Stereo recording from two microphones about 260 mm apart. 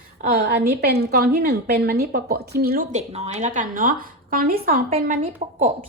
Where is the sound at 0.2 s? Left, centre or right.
Right.